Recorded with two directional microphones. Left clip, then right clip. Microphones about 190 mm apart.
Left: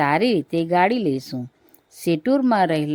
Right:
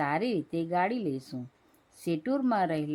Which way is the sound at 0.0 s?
35° left (ahead or behind).